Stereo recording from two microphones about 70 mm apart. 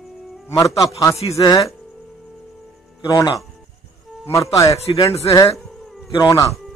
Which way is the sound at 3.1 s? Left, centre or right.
Left.